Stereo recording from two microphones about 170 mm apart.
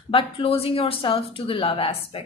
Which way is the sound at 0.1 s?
30° left (ahead or behind).